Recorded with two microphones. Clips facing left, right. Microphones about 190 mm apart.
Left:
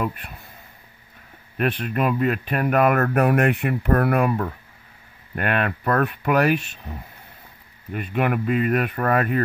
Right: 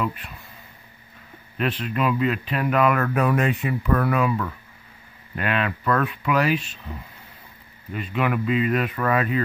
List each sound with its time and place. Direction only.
0.0 s speech: 50° left (ahead or behind)
1.6 s speech: 50° left (ahead or behind)
7.9 s speech: 50° left (ahead or behind)